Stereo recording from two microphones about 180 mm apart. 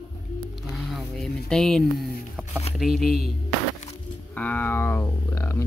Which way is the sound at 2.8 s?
Centre (ahead or behind).